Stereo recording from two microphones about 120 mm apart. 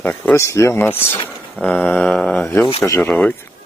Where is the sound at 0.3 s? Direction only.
25° left (ahead or behind).